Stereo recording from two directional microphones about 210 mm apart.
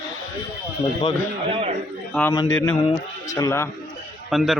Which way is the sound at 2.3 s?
20° left (ahead or behind).